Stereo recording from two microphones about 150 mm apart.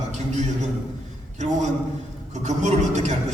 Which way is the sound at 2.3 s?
50° right (ahead or behind).